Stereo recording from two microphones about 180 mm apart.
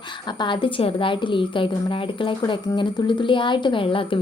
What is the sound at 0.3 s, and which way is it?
A woman's voice, 25° left (ahead or behind).